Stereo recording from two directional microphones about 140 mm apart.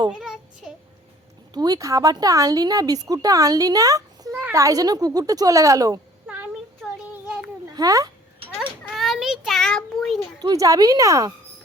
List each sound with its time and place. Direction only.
0.1 s child singing: 5° right (ahead or behind)
1.5 s a woman's voice: 25° right (ahead or behind)
6.2 s a sound: 10° right (ahead or behind)
7.1 s children playing: 10° right (ahead or behind)
7.8 s a woman's voice: 25° right (ahead or behind)
8.8 s child singing: centre (ahead or behind)
10.4 s a woman's voice: 25° right (ahead or behind)